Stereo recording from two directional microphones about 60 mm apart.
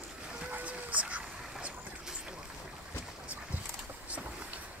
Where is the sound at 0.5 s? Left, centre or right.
Right.